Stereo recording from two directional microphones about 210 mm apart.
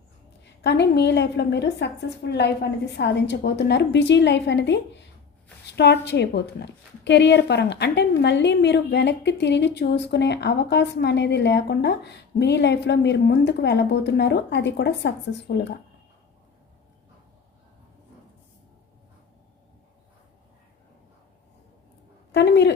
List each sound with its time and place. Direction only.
0.4 s a woman's voice: 55° left (ahead or behind)
22.3 s a woman's voice: 55° left (ahead or behind)